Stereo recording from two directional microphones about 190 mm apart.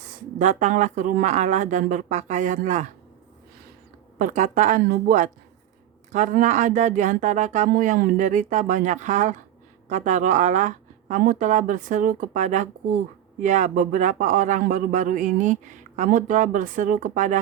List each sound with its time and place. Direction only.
0.2 s speech: 40° right (ahead or behind)
4.2 s a woman's voice: 40° right (ahead or behind)